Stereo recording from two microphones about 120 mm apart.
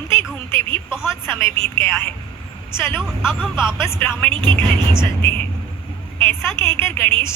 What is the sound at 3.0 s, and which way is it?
Speech, 5° right (ahead or behind).